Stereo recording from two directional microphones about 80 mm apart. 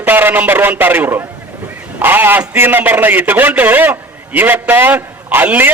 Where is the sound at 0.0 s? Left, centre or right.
Right.